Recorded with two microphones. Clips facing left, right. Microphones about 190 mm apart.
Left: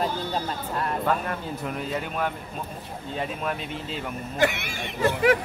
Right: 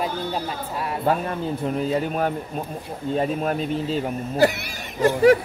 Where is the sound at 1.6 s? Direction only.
35° right (ahead or behind).